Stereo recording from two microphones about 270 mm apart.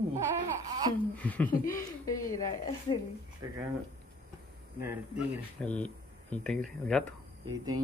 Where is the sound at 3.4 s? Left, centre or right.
Centre.